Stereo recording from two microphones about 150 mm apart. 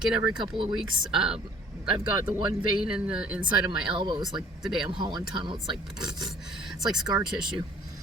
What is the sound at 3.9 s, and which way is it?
Speech, 30° right (ahead or behind).